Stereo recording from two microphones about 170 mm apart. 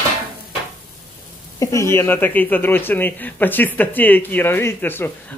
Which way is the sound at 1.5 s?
20° left (ahead or behind).